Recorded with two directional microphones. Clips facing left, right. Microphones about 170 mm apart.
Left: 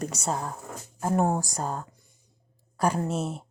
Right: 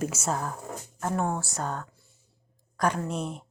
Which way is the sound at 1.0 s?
35° left (ahead or behind).